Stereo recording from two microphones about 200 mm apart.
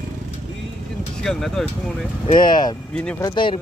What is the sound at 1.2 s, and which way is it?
Speech, centre (ahead or behind).